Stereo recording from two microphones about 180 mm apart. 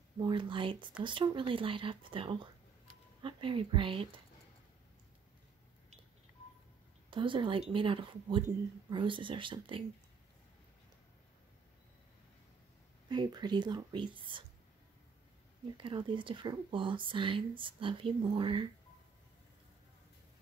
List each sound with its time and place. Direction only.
0.2 s speech: 25° right (ahead or behind)
7.1 s speech: 25° right (ahead or behind)
13.1 s speech: 25° right (ahead or behind)
15.8 s speech: 25° right (ahead or behind)